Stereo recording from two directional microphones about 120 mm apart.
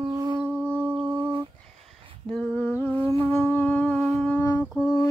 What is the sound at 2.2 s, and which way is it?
Humming, 10° left (ahead or behind).